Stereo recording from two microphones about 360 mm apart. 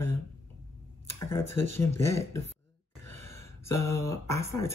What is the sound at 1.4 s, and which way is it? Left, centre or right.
Speech, left.